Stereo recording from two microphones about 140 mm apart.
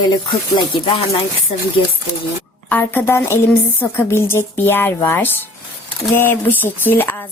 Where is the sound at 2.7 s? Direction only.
15° left (ahead or behind).